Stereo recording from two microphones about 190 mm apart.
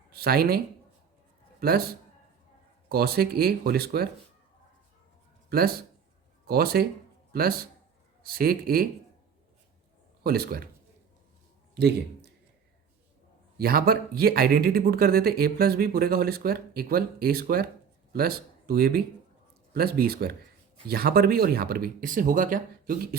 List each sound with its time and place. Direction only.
0.1 s speech: 55° right (ahead or behind)
1.6 s speech: 50° right (ahead or behind)
5.5 s speech: 55° right (ahead or behind)
10.2 s speech: 55° right (ahead or behind)
11.7 s a man's voice: 60° right (ahead or behind)
13.6 s speech: 50° right (ahead or behind)